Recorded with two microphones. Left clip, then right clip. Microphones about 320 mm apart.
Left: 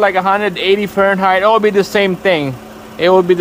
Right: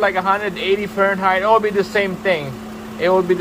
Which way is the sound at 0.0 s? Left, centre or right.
Left.